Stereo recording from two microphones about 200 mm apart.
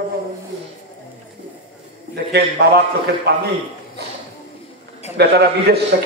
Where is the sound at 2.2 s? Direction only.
55° right (ahead or behind).